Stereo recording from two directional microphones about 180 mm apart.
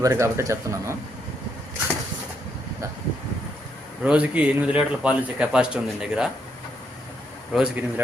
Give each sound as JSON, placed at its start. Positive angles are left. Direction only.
{"t": 0.0, "sound": "a man's voice", "side_deg": -15}
{"t": 4.0, "sound": "a man's voice", "side_deg": -5}
{"t": 7.5, "sound": "a man's voice", "side_deg": -5}